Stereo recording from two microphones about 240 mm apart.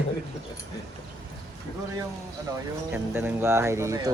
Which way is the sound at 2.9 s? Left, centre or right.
Centre.